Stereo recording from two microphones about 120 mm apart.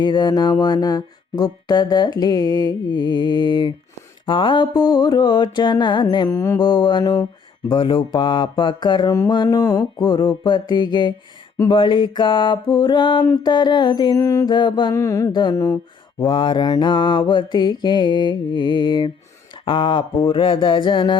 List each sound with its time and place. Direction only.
0.0 s speech: 35° left (ahead or behind)
6.3 s mantra: 25° left (ahead or behind)
6.6 s speech: 35° left (ahead or behind)
14.2 s mantra: 25° left (ahead or behind)
14.5 s speech: 40° left (ahead or behind)
14.9 s mantra: 25° left (ahead or behind)
15.3 s speech: 40° left (ahead or behind)
15.5 s mantra: 25° left (ahead or behind)
16.2 s speech: 45° left (ahead or behind)
19.6 s a sound: 45° left (ahead or behind)